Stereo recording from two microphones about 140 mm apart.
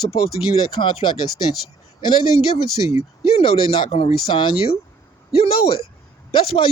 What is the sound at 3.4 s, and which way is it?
Speech, 45° left (ahead or behind).